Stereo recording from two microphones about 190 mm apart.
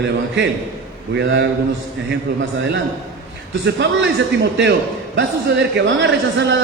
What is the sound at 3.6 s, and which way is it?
A man's voice, 65° right (ahead or behind).